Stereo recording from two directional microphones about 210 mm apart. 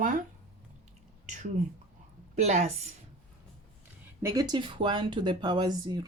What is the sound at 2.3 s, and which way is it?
Speech, 35° right (ahead or behind).